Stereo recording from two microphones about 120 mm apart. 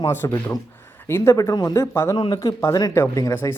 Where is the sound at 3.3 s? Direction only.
20° left (ahead or behind).